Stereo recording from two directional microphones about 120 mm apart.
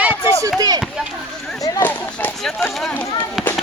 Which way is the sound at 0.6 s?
35° right (ahead or behind).